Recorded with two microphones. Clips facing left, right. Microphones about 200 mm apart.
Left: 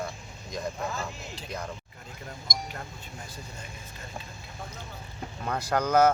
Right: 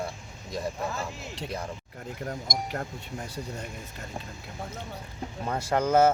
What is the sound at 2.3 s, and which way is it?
Speech, 55° right (ahead or behind).